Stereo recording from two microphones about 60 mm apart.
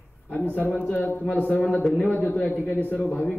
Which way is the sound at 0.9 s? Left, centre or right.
Left.